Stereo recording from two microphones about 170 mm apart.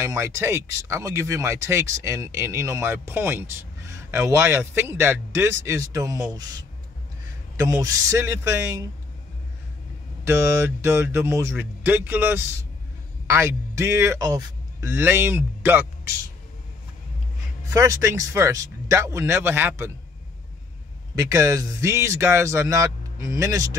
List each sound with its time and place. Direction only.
0.0 s speech: 15° right (ahead or behind)
10.2 s speech: 15° right (ahead or behind)
17.6 s speech: 20° right (ahead or behind)
21.1 s speech: 20° right (ahead or behind)